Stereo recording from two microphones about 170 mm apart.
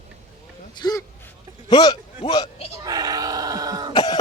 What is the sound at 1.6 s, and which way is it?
Speech, 25° left (ahead or behind).